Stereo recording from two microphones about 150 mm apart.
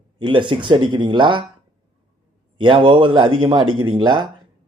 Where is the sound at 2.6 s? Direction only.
35° right (ahead or behind).